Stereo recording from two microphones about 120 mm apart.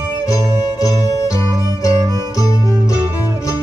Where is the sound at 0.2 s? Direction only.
30° left (ahead or behind).